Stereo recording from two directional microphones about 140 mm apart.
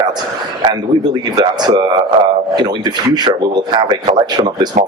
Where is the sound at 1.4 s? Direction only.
30° right (ahead or behind).